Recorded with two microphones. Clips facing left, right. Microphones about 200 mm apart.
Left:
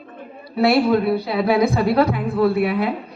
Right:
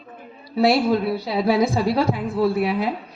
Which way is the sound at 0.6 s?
60° left (ahead or behind).